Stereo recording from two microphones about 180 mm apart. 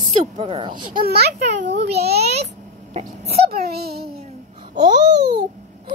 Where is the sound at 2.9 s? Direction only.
35° right (ahead or behind).